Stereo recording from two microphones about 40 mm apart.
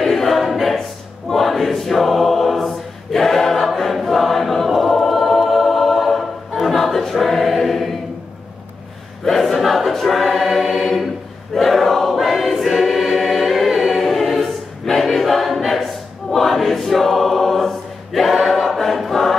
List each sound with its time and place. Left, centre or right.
0.0 s choir: centre
9.2 s choir: centre